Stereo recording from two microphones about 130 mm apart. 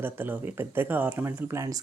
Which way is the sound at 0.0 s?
15° right (ahead or behind).